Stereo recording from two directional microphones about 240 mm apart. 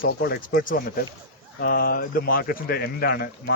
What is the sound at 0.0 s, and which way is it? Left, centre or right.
Speech, left.